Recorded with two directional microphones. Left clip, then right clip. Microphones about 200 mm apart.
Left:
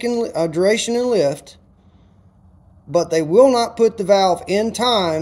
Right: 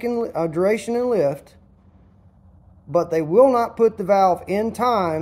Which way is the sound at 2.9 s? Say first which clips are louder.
Left 3 dB; 10° left (ahead or behind).